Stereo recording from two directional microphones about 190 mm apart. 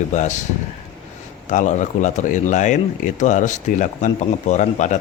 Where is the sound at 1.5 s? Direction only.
40° left (ahead or behind).